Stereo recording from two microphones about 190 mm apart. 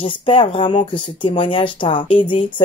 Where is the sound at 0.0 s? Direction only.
25° left (ahead or behind).